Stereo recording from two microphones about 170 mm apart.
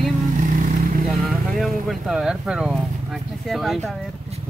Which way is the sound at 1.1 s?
Centre (ahead or behind).